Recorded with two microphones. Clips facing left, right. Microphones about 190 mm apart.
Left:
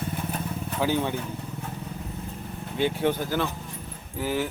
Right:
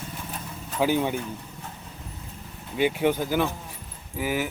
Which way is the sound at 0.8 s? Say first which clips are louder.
Right 2 dB; 15° right (ahead or behind).